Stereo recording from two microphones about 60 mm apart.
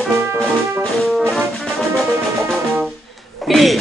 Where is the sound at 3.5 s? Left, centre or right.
Centre.